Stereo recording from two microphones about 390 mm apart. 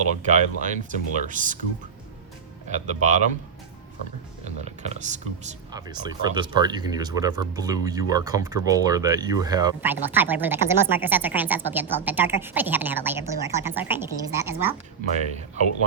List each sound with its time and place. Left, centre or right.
0.2 s speech: centre
2.6 s speech: centre
4.6 s speech: centre